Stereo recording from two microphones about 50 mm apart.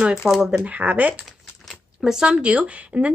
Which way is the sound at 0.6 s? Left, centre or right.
Right.